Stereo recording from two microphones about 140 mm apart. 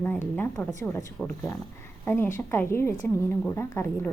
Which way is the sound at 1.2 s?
10° left (ahead or behind).